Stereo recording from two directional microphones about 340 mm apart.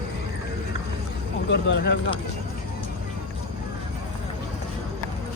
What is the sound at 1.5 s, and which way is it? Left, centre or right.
Speech, left.